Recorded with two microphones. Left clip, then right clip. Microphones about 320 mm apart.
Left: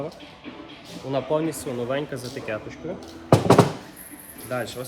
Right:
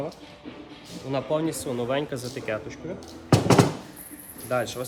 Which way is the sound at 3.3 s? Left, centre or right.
Centre.